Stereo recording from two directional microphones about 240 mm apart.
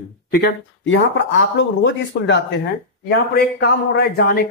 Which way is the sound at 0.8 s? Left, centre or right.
Left.